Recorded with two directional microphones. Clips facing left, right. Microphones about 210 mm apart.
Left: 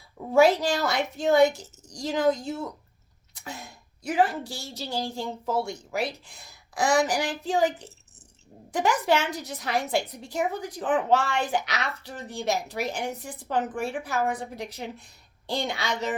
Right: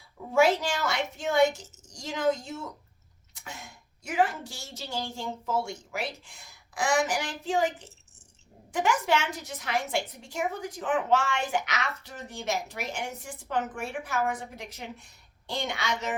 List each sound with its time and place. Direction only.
0.3 s a woman's voice: 35° left (ahead or behind)